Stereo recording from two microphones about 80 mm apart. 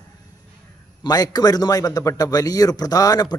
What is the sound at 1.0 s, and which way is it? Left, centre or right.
Speech, left.